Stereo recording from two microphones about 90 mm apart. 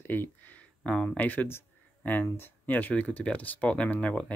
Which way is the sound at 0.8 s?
10° left (ahead or behind).